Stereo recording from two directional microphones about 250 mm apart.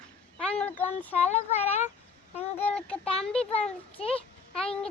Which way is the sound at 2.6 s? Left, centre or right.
Centre.